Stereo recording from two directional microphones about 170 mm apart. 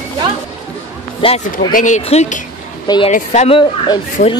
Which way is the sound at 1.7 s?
45° left (ahead or behind).